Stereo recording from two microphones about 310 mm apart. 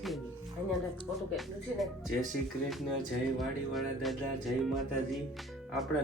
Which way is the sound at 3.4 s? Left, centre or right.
Centre.